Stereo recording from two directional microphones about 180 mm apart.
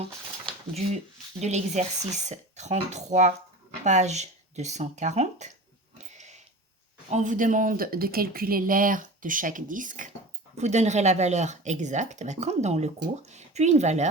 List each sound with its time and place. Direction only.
1.4 s speech: 40° right (ahead or behind)
6.0 s a sound: 40° right (ahead or behind)
7.1 s speech: 45° right (ahead or behind)